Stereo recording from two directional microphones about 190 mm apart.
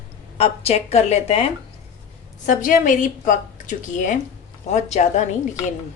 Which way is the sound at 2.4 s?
45° left (ahead or behind).